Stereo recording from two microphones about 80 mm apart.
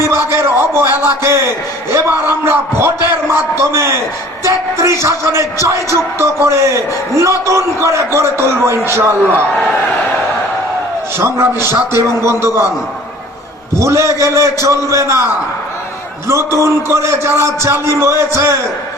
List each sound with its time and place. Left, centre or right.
0.0 s a sound: right
1.9 s music: right
11.2 s music: right
13.7 s music: right